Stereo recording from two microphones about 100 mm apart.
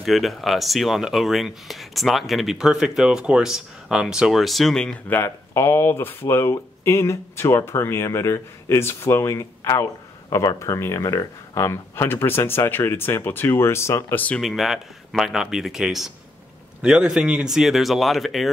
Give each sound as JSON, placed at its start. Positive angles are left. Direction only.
{"t": 0.0, "sound": "speech", "side_deg": 0}
{"t": 5.1, "sound": "speech", "side_deg": 25}
{"t": 14.4, "sound": "speech", "side_deg": 0}